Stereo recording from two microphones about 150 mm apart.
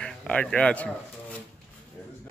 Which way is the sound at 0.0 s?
5° left (ahead or behind).